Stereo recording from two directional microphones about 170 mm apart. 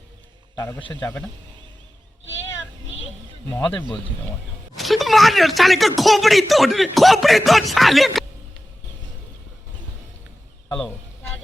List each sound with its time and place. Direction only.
0.5 s a man's voice: 15° left (ahead or behind)
3.5 s speech: 10° left (ahead or behind)
10.7 s a sound: 10° left (ahead or behind)